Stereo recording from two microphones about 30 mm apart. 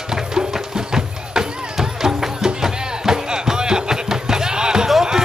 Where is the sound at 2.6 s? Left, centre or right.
Right.